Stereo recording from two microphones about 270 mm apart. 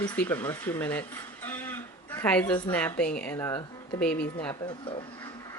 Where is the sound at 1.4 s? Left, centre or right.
Centre.